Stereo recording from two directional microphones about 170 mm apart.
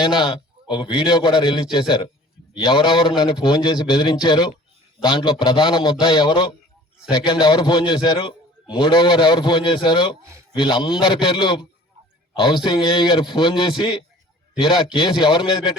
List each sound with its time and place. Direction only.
0.0 s a man's voice: 25° left (ahead or behind)